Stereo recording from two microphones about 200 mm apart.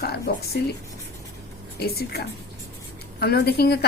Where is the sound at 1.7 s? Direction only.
50° left (ahead or behind).